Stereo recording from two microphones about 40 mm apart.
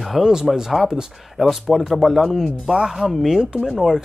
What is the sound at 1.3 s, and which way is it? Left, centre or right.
Speech, centre.